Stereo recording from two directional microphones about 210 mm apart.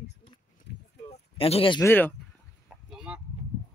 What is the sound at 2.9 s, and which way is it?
Honk, 5° right (ahead or behind).